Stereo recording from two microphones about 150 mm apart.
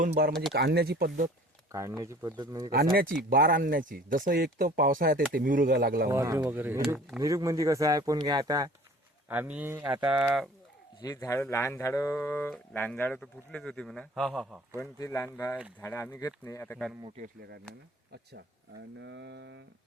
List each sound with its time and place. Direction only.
0.5 s speech: 90° right
1.7 s speech: 20° right (ahead or behind)
2.7 s speech: 90° right
3.2 s speech: 75° right (ahead or behind)
6.1 s speech: 20° right (ahead or behind)
9.3 s speech: 10° right (ahead or behind)
9.8 s speech: 30° right (ahead or behind)
11.0 s speech: 20° left (ahead or behind); by 14.6 s centre (ahead or behind)
14.8 s speech: 20° left (ahead or behind)
17.2 s speech: 65° right (ahead or behind)